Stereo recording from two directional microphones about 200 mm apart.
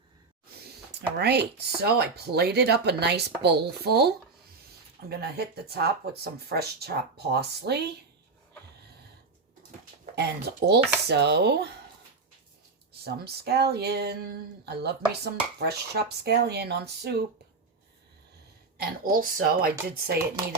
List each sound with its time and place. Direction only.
1.1 s speech: 55° right (ahead or behind)
10.6 s speech: 55° right (ahead or behind)
13.1 s speech: 50° right (ahead or behind)
18.8 s speech: 45° right (ahead or behind)